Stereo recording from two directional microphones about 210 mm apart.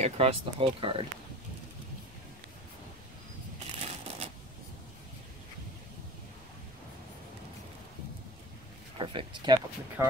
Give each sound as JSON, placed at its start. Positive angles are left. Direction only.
{"t": 0.0, "sound": "speech", "side_deg": -30}
{"t": 3.6, "sound": "crushing", "side_deg": -30}
{"t": 8.9, "sound": "speech", "side_deg": -25}
{"t": 10.0, "sound": "speech", "side_deg": -10}